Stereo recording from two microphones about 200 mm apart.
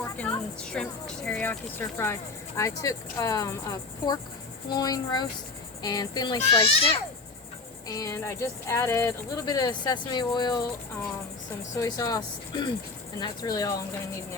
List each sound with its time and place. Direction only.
0.2 s a child's voice: 5° left (ahead or behind); by 10.6 s 20° left (ahead or behind)
11.8 s a child's voice: 20° left (ahead or behind)